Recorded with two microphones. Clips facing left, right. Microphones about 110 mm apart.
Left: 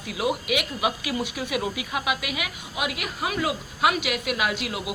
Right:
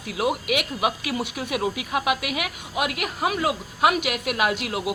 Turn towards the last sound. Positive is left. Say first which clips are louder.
# right 3 dB
turn(degrees=-45)  # may be behind; listen again after turning